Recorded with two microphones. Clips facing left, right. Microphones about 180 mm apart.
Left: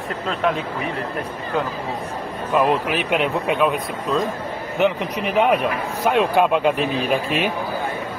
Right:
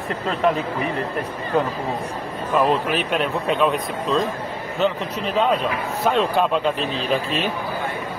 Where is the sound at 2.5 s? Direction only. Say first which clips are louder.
Even; 10° left (ahead or behind).